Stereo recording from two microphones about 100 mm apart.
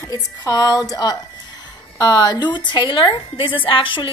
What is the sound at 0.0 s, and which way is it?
Speech, 35° left (ahead or behind).